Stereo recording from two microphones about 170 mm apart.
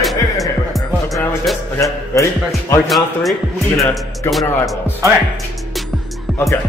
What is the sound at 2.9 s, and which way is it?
Speech, centre (ahead or behind).